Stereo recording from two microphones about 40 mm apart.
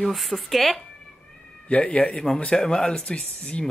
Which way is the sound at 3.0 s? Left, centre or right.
Left.